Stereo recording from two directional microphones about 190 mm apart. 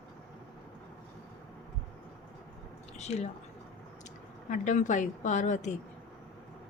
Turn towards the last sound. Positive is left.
turn(degrees=40)  # may be behind; listen again after turning